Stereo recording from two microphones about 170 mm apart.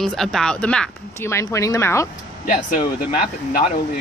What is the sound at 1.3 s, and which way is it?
Speech, 15° left (ahead or behind).